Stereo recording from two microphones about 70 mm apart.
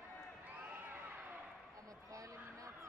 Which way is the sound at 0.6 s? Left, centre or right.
Right.